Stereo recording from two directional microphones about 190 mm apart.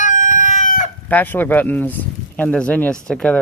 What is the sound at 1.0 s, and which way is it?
Speech, 10° left (ahead or behind).